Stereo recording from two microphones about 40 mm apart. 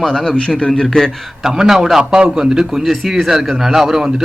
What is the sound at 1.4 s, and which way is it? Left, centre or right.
Speech, centre.